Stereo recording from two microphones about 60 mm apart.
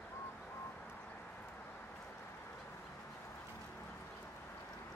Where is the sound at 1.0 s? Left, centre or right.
Centre.